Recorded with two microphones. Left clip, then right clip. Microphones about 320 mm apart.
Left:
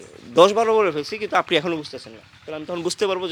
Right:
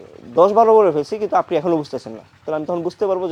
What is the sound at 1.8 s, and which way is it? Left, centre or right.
Speech, right.